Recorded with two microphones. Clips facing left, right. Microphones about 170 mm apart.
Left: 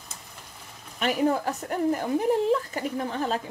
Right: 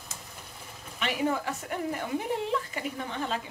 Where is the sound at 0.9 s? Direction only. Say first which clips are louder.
Left 5 dB; 40° left (ahead or behind).